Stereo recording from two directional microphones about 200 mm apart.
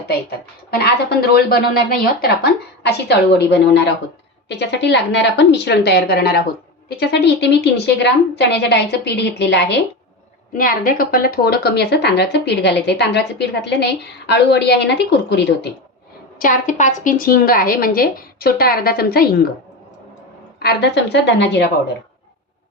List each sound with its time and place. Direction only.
0.3 s speech: 55° left (ahead or behind)
10.6 s speech: 45° left (ahead or behind)
16.4 s speech: 40° left (ahead or behind)
20.6 s speech: 55° left (ahead or behind)